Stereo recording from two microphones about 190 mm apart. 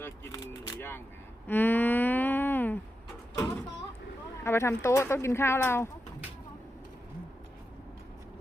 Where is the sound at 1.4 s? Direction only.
10° left (ahead or behind).